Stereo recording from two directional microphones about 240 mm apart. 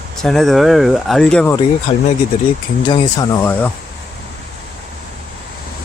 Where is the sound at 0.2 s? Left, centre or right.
Centre.